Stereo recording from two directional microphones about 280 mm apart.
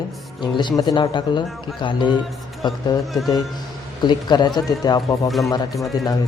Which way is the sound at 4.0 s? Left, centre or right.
Centre.